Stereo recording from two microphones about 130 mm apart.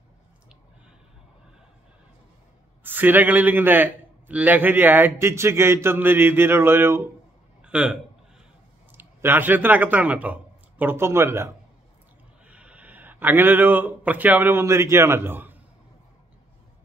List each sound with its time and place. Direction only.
2.8 s a man's voice: 15° right (ahead or behind)